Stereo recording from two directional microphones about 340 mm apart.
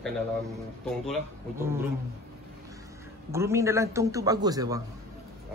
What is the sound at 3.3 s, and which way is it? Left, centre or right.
A man's voice, centre.